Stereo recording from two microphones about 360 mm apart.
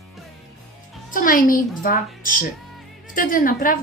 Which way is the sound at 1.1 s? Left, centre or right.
Left.